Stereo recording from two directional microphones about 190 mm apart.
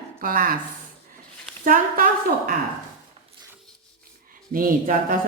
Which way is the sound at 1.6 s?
45° right (ahead or behind).